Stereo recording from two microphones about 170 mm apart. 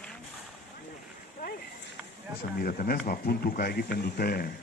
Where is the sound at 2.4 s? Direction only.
60° left (ahead or behind).